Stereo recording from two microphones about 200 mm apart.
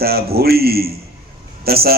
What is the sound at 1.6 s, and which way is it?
Speech, 50° right (ahead or behind).